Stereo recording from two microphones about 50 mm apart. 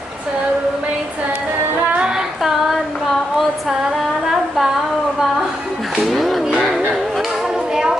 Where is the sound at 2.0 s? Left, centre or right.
Centre.